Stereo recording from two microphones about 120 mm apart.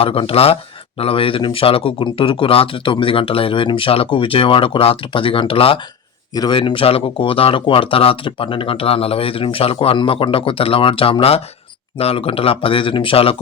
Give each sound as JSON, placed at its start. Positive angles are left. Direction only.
{"t": 0.0, "sound": "speech", "side_deg": 50}
{"t": 6.3, "sound": "speech", "side_deg": 35}
{"t": 6.6, "sound": "speech", "side_deg": 45}